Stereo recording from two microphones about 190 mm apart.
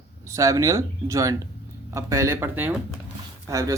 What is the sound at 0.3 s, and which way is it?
Speech, 15° right (ahead or behind).